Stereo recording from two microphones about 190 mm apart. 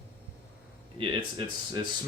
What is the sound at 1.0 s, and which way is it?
Speech, 25° right (ahead or behind).